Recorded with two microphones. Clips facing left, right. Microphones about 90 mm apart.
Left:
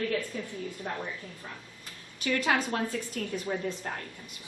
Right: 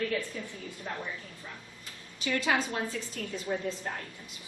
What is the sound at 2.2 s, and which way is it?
A woman's voice, 50° left (ahead or behind).